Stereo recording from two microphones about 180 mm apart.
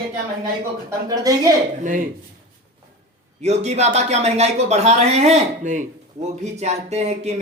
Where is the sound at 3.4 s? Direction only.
35° right (ahead or behind).